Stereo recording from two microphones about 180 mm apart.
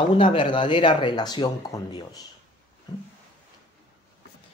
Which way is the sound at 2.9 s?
20° left (ahead or behind).